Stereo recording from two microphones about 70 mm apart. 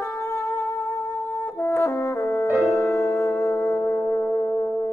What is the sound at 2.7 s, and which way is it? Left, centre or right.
Music, left.